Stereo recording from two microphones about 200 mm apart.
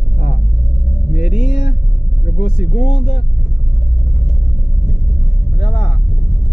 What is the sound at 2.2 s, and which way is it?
Speech, 40° left (ahead or behind).